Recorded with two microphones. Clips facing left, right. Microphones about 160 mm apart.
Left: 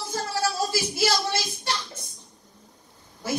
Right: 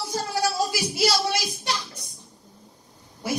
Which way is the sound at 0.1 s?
15° right (ahead or behind).